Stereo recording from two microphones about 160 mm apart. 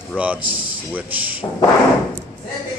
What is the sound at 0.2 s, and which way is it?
Speech, 10° right (ahead or behind).